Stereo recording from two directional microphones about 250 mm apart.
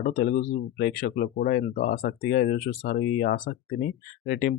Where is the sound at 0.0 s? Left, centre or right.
Left.